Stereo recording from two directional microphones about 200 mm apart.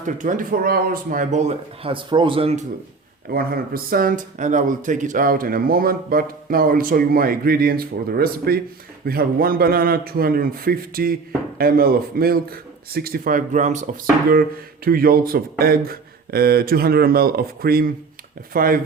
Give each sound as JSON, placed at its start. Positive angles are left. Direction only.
{"t": 0.0, "sound": "speech", "side_deg": -40}
{"t": 3.2, "sound": "speech", "side_deg": -50}